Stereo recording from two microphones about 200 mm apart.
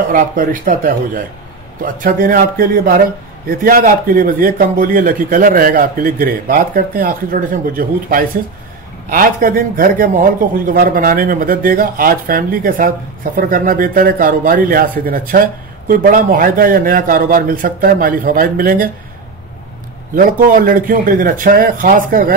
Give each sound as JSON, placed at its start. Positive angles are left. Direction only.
{"t": 0.1, "sound": "speech", "side_deg": -40}
{"t": 20.2, "sound": "speech", "side_deg": -45}